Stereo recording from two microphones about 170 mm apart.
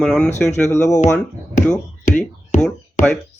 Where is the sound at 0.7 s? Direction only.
15° left (ahead or behind).